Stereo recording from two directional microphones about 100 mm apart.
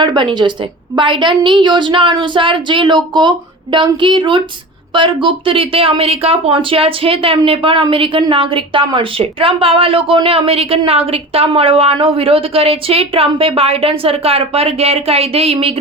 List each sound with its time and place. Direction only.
0.0 s a woman's voice: 50° right (ahead or behind); by 15.5 s 85° right